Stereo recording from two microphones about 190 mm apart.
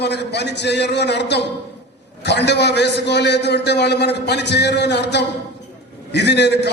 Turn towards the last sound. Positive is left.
turn(degrees=60)  # may be behind; listen again after turning